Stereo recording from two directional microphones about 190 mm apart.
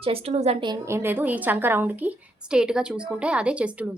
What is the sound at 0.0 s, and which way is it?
Speech, 30° right (ahead or behind).